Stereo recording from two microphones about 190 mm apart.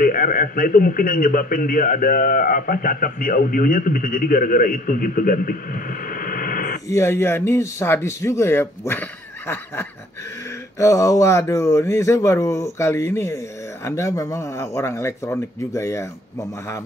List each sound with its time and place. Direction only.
0.0 s a man's voice: 45° left (ahead or behind)
6.9 s speech: 15° left (ahead or behind)